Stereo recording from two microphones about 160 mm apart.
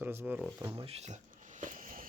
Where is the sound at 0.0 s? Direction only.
15° right (ahead or behind).